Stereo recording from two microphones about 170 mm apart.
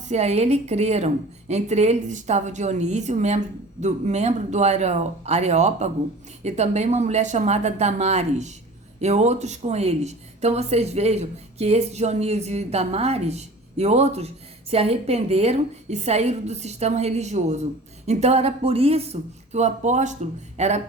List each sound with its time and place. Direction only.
0.1 s speech: 40° right (ahead or behind)